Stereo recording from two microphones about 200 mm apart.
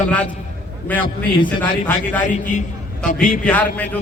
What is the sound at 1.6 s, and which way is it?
Speech, 10° left (ahead or behind).